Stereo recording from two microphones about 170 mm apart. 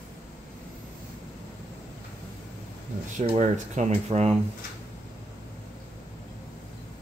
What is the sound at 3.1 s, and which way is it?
Speech, 45° right (ahead or behind).